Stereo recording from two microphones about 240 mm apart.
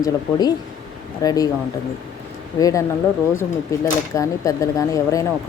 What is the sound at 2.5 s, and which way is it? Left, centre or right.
Speech, centre.